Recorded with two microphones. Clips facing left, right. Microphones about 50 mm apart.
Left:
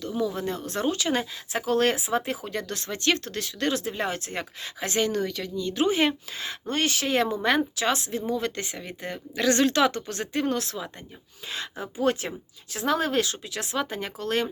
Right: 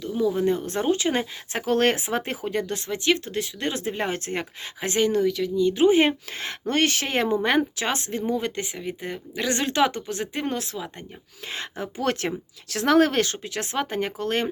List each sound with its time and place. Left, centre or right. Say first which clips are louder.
0.0 s a sound: right 4 dB; centre
0.4 s speech: right 5 dB; right
1.5 s speech: right 2 dB; right
5.2 s speech: right 7 dB; centre
5.5 s speech: right 5 dB; centre
6.3 s speech: right 4 dB; right
8.3 s speech: right 2 dB; right
8.6 s speech: right 3 dB; centre
10.1 s speech: left 1 dB; centre
11.4 s speech: right 2 dB; right